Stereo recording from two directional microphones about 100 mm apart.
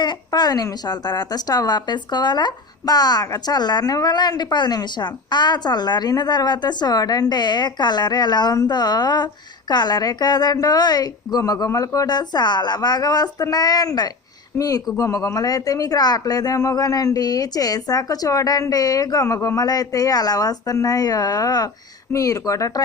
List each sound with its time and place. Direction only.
0.0 s a woman's voice: 45° left (ahead or behind)
14.5 s speech: 30° left (ahead or behind)